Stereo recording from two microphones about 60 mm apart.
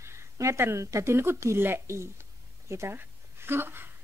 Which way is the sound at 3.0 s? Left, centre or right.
Right.